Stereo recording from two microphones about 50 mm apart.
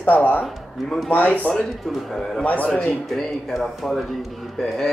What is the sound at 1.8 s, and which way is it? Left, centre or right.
Speech, centre.